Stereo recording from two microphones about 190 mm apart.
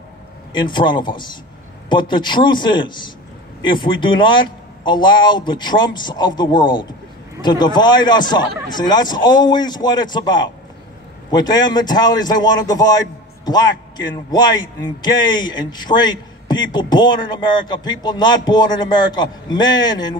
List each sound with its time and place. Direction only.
0.5 s speech: 25° left (ahead or behind)